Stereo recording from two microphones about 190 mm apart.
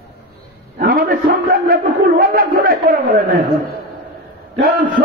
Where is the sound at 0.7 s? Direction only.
50° right (ahead or behind).